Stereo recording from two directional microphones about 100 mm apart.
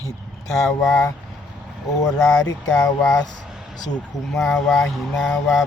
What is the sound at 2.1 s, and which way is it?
Speech, 5° left (ahead or behind).